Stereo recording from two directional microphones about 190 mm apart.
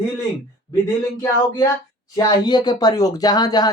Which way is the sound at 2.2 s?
20° left (ahead or behind).